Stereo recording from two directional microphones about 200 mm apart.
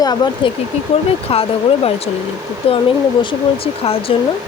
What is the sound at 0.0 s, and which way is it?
Speech, 20° left (ahead or behind).